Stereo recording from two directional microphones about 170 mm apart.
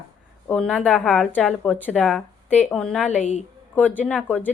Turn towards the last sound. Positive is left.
turn(degrees=10)  # may be behind; listen again after turning